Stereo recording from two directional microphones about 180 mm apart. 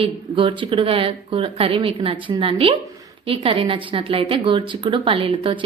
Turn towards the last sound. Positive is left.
turn(degrees=-30)  # may be behind; listen again after turning